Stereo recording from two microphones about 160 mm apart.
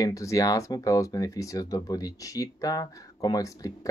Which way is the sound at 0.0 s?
20° left (ahead or behind).